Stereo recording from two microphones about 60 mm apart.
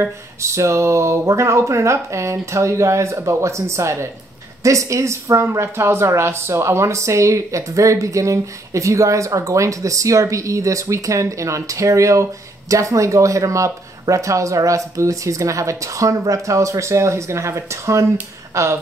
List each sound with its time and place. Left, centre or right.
0.0 s a woman's voice: right